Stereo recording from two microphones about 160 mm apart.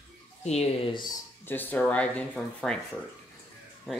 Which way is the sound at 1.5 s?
10° left (ahead or behind).